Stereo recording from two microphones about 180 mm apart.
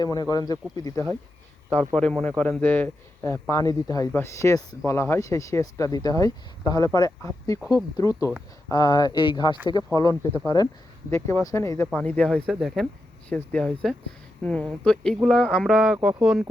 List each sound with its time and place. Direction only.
0.0 s speech: 20° left (ahead or behind)
2.0 s speech: 5° left (ahead or behind)